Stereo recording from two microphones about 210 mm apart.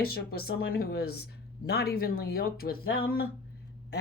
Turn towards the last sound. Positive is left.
turn(degrees=45)  # may be behind; listen again after turning